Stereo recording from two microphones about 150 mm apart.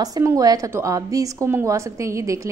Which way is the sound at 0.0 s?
20° right (ahead or behind).